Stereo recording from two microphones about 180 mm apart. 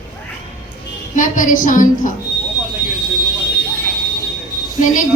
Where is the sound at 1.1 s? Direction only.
45° left (ahead or behind).